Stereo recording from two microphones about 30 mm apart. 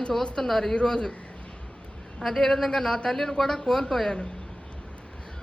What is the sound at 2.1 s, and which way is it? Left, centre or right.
A man's voice, centre.